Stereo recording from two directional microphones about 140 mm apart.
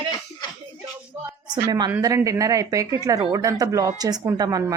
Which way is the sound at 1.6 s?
20° right (ahead or behind).